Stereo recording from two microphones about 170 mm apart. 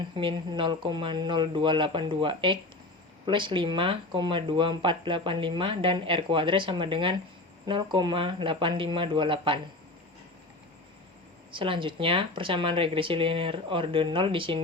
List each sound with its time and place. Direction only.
0.2 s speech: 30° right (ahead or behind)
11.5 s speech: 30° right (ahead or behind)